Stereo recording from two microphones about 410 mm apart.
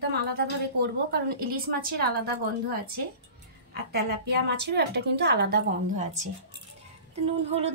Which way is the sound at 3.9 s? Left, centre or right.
Right.